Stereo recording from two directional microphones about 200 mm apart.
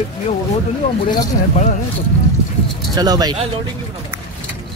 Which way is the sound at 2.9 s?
20° right (ahead or behind).